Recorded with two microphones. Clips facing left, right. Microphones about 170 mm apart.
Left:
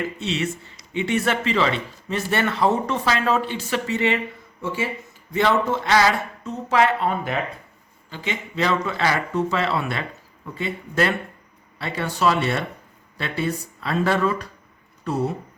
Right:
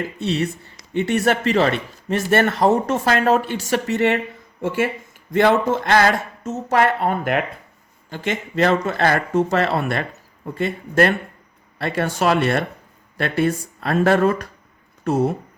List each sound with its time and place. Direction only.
0.9 s speech: 45° right (ahead or behind)
3.8 s speech: 65° right (ahead or behind)
4.6 s speech: 55° right (ahead or behind)